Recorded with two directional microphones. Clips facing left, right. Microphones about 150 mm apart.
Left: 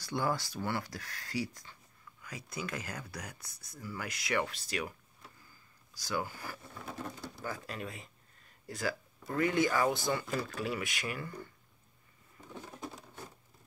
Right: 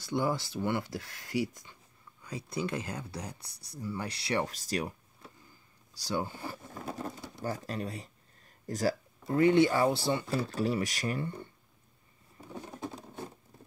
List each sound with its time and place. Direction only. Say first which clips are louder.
0.0 s speech: right 3 dB; 20° right (ahead or behind); by 4.8 s 40° right (ahead or behind)
5.9 s speech: right 3 dB; 30° right (ahead or behind)
6.7 s speech: right 3 dB; 35° right (ahead or behind)
9.3 s speech: right 6 dB; 30° right (ahead or behind)
12.4 s a sound: right 4 dB; 15° right (ahead or behind)
12.8 s patter: right 4 dB; 25° right (ahead or behind)